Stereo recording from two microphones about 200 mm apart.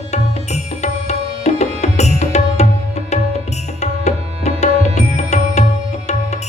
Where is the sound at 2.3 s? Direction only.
35° left (ahead or behind).